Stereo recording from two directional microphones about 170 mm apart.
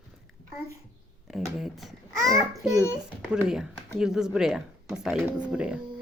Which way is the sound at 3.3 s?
5° right (ahead or behind).